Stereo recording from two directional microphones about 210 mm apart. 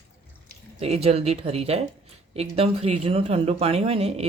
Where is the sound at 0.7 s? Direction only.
30° right (ahead or behind).